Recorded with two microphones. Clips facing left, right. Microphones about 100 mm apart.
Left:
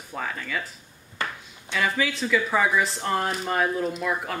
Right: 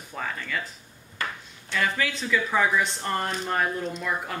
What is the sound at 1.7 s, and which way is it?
Speech, 5° left (ahead or behind).